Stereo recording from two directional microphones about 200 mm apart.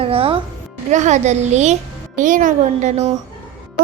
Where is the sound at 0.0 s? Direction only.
25° right (ahead or behind).